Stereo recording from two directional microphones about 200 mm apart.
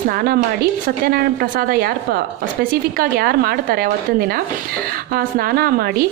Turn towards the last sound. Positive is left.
turn(degrees=-50)  # may be behind; listen again after turning